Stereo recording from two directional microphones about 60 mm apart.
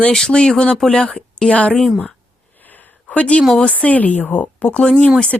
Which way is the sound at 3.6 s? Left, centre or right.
Centre.